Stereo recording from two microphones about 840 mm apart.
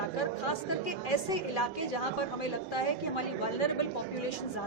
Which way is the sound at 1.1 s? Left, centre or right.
Left.